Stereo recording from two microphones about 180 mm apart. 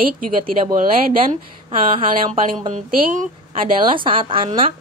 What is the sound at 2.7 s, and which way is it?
Speech, 45° right (ahead or behind).